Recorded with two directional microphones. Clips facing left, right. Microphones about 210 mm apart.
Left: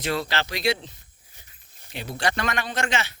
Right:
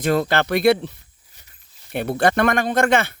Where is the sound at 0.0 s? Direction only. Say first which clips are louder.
Right 8 dB; 50° right (ahead or behind).